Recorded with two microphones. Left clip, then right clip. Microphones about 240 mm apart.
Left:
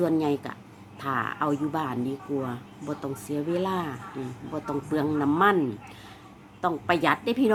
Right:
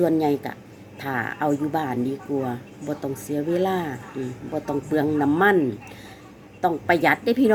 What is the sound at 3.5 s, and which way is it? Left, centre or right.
A woman's voice, centre.